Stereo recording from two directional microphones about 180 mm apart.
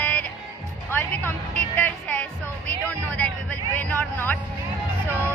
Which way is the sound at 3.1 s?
10° left (ahead or behind).